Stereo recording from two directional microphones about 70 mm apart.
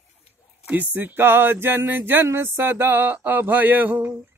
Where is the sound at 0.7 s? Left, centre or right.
Right.